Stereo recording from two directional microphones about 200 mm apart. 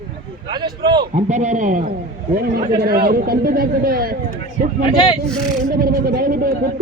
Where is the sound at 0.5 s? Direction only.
20° right (ahead or behind).